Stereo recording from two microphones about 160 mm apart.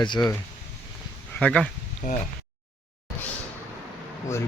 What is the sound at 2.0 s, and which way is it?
Speech, 45° left (ahead or behind).